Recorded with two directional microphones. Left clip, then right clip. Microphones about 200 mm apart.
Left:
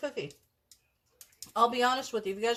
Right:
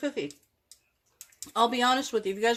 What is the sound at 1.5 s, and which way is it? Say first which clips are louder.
Speech: right 2 dB; 50° right (ahead or behind).